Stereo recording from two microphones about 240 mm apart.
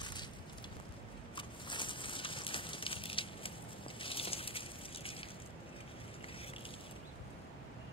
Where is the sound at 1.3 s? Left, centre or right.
Centre.